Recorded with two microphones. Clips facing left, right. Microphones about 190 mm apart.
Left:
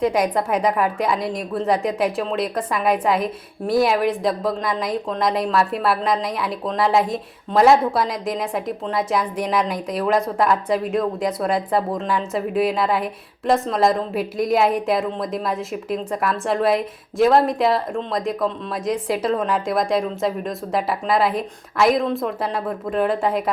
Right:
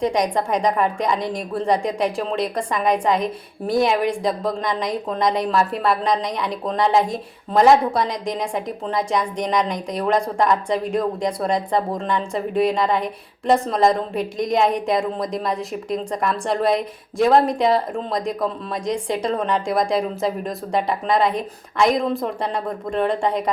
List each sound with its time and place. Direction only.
0.0 s speech: 5° left (ahead or behind)